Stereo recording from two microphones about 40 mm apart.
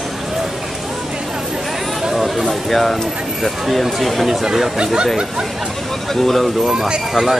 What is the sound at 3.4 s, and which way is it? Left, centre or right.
Speech, centre.